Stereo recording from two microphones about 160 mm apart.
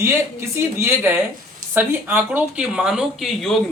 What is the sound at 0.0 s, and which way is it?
Speech, 15° right (ahead or behind).